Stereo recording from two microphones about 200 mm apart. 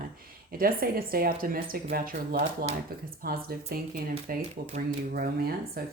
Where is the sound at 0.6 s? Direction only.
50° right (ahead or behind).